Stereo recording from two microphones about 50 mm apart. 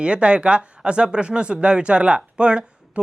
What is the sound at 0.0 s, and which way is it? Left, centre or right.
Speech, right.